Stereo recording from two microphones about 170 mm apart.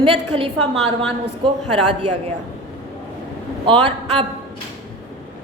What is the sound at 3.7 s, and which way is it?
Speech, 30° right (ahead or behind).